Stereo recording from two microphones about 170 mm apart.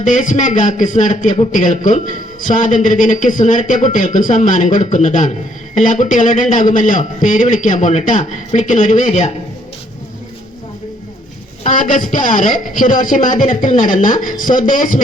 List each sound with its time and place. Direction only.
0.0 s a man's voice: 50° left (ahead or behind)
11.6 s a man's voice: 50° left (ahead or behind)